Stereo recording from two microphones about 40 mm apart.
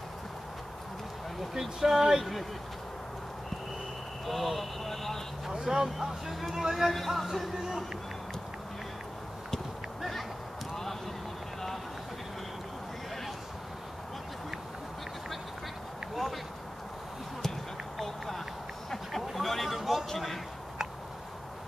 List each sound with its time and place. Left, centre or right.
1.5 s speech: centre
4.3 s vehicle: centre
5.5 s speech: centre
6.9 s speech: centre
19.3 s a sound: centre
20.1 s a man's voice: centre